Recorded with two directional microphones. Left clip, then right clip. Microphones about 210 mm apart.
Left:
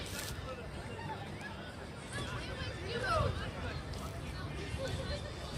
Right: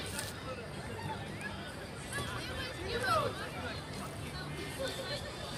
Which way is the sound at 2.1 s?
25° right (ahead or behind).